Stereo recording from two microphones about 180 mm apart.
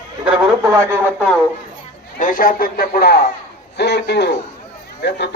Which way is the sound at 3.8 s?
70° left (ahead or behind).